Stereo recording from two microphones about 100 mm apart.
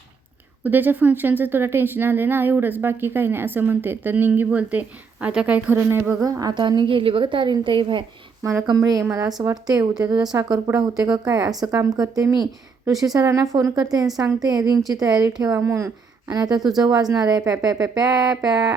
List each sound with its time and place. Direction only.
0.6 s a woman's voice: 20° right (ahead or behind)
6.2 s a woman's voice: 40° right (ahead or behind); by 8.0 s 55° right (ahead or behind)
8.7 s a woman's voice: 35° right (ahead or behind)